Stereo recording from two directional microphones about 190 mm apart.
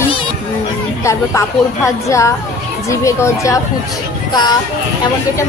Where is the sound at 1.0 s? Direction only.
15° left (ahead or behind).